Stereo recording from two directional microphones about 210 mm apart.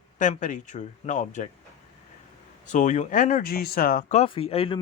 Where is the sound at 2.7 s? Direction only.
35° left (ahead or behind).